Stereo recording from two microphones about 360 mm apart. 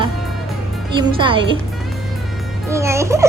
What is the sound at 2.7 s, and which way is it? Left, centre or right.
Speech, centre.